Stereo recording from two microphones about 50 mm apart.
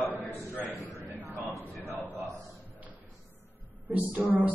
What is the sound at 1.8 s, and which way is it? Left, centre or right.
Speech, right.